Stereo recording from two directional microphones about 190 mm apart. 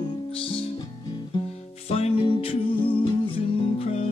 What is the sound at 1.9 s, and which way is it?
Music, 35° left (ahead or behind).